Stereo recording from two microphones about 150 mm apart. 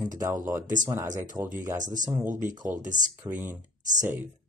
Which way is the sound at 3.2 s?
15° right (ahead or behind).